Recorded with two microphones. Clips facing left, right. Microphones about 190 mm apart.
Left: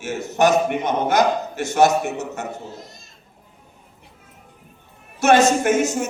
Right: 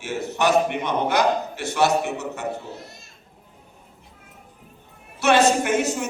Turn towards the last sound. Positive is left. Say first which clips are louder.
# left 3 dB
turn(degrees=45)  # may be behind; listen again after turning